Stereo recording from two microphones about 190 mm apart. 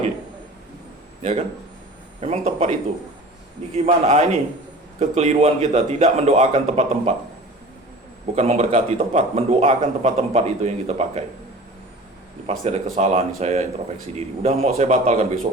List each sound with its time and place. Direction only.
1.2 s a man's voice: 35° right (ahead or behind)
8.4 s a man's voice: 35° right (ahead or behind)
12.5 s a man's voice: 35° right (ahead or behind)